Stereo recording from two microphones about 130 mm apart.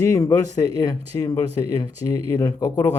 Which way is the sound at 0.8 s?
30° left (ahead or behind).